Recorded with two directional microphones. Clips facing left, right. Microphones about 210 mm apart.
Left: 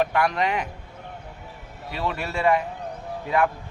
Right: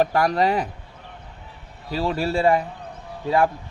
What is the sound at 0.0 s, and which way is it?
Speech, 35° right (ahead or behind).